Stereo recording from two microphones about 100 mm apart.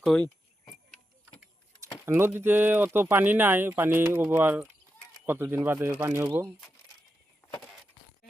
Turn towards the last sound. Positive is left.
turn(degrees=20)  # may be behind; listen again after turning